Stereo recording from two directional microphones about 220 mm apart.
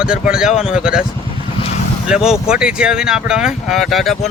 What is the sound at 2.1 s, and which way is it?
Speech, 5° right (ahead or behind).